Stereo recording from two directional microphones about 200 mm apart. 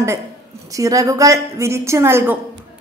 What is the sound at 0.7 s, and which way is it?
A woman's voice, 15° right (ahead or behind).